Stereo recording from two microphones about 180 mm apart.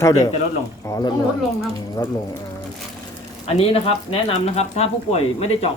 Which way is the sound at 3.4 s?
35° left (ahead or behind).